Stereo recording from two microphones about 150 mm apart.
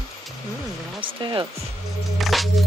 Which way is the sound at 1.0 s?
35° right (ahead or behind).